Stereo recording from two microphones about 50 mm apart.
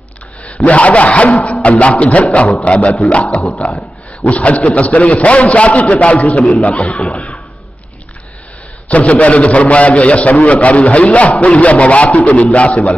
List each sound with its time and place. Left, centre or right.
0.7 s a man's voice: left
3.3 s speech: centre
4.3 s a man's voice: left
8.8 s a man's voice: left